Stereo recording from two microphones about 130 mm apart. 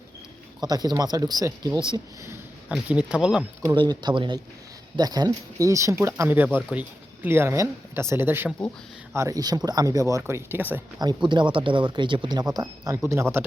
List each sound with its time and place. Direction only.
0.6 s speech: 30° right (ahead or behind)
2.6 s speech: 10° right (ahead or behind)
3.8 s speech: 35° right (ahead or behind); by 10.8 s 15° right (ahead or behind)
11.0 s speech: 35° right (ahead or behind); by 13.4 s 20° right (ahead or behind)